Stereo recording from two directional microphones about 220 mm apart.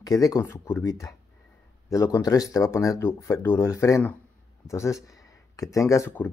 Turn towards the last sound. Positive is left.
turn(degrees=10)  # may be behind; listen again after turning